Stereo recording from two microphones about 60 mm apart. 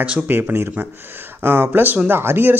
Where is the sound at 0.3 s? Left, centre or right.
Right.